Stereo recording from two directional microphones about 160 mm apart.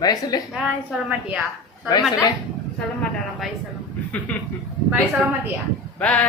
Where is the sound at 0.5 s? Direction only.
5° right (ahead or behind).